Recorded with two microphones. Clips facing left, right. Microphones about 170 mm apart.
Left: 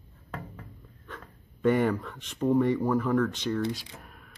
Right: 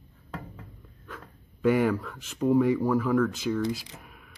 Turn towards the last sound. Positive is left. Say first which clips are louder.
# even
turn(degrees=-5)  # may be behind; listen again after turning